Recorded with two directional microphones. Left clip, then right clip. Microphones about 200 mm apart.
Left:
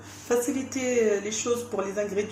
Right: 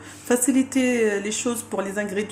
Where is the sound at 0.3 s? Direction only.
40° right (ahead or behind).